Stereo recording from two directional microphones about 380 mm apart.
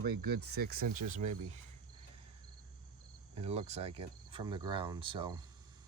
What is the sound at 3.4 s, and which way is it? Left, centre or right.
Speech, centre.